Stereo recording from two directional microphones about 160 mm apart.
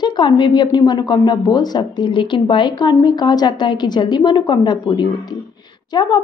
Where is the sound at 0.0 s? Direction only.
30° left (ahead or behind).